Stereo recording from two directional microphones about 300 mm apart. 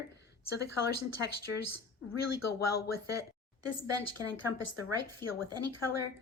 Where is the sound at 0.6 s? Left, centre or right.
Left.